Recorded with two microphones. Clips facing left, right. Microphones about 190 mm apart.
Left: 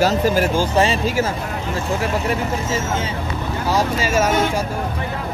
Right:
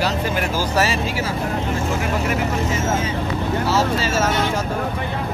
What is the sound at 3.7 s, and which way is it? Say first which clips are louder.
Speech: left 3 dB; 15° left (ahead or behind).